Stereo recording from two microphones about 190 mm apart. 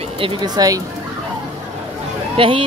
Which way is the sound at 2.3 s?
30° right (ahead or behind).